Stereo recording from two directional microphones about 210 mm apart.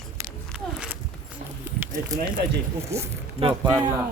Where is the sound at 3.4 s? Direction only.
25° right (ahead or behind).